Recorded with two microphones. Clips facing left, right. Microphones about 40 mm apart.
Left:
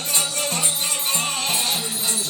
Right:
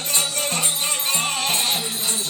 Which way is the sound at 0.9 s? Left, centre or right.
Right.